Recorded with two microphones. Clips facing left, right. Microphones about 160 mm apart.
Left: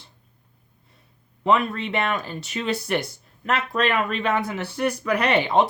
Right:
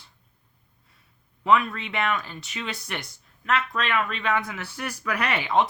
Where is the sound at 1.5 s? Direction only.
30° left (ahead or behind).